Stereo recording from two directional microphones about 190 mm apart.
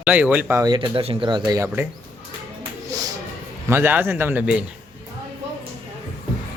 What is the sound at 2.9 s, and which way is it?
Music, 20° right (ahead or behind).